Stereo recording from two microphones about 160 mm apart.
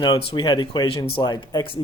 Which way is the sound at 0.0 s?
35° left (ahead or behind).